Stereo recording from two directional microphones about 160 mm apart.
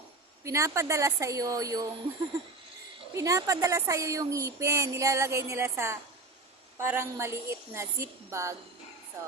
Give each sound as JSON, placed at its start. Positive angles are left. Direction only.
{"t": 0.4, "sound": "speech", "side_deg": -20}
{"t": 3.2, "sound": "a woman's voice", "side_deg": -20}